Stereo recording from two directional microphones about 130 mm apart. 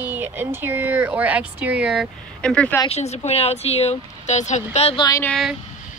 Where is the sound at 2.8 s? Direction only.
55° left (ahead or behind).